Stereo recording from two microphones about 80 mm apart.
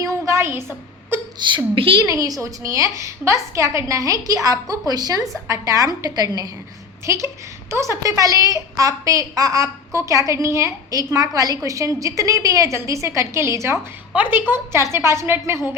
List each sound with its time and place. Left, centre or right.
0.0 s a sound: right
1.4 s a woman's voice: right
2.0 s a woman's voice: right
7.0 s a woman's voice: right
14.1 s a woman's voice: right
14.9 s a woman's voice: right